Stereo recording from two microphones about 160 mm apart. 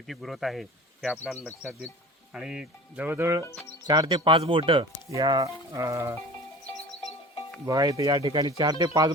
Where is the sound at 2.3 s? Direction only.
5° right (ahead or behind).